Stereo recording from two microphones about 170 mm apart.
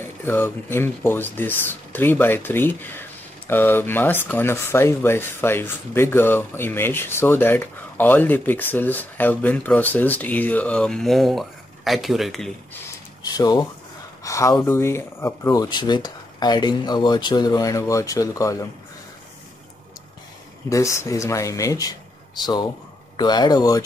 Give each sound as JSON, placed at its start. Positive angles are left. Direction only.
{"t": 0.0, "sound": "speech", "side_deg": 10}
{"t": 13.2, "sound": "speech", "side_deg": 20}
{"t": 20.7, "sound": "speech", "side_deg": 15}
{"t": 23.1, "sound": "speech", "side_deg": 25}